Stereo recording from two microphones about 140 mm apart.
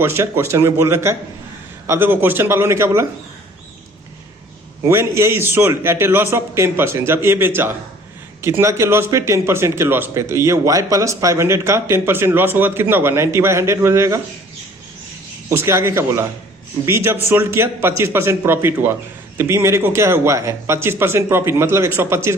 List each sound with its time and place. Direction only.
0.0 s a man's voice: 15° right (ahead or behind)
4.9 s a man's voice: 20° right (ahead or behind)
15.4 s a man's voice: 20° right (ahead or behind)